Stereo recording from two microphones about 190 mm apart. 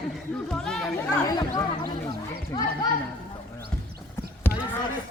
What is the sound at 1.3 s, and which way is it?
Speech, 20° left (ahead or behind).